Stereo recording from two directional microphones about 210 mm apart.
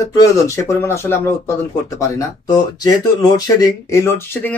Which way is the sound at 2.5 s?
20° left (ahead or behind).